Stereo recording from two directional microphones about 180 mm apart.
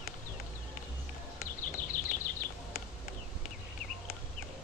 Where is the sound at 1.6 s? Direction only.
50° left (ahead or behind).